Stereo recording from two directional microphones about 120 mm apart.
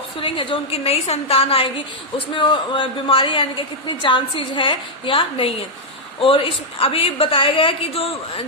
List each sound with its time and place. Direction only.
0.2 s a woman's voice: 50° left (ahead or behind)